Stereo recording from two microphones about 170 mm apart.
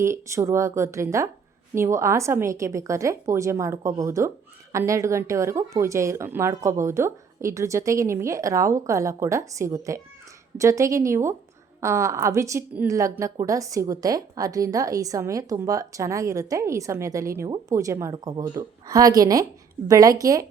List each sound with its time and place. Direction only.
0.0 s speech: 15° right (ahead or behind)